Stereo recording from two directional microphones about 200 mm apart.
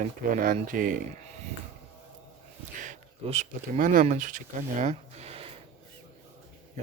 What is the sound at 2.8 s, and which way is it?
Speech, 35° right (ahead or behind).